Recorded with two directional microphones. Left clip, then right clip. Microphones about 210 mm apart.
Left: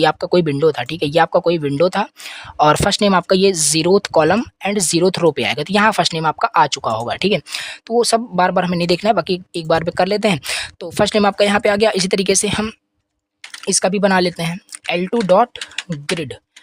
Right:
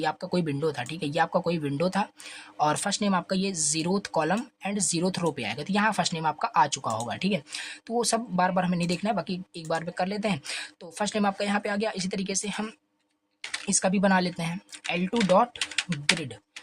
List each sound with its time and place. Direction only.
0.0 s speech: 50° left (ahead or behind)